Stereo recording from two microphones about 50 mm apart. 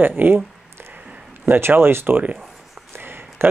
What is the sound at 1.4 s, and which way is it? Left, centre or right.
Speech, right.